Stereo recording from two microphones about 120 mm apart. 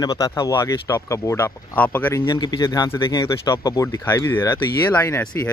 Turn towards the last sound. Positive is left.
turn(degrees=20)  # may be behind; listen again after turning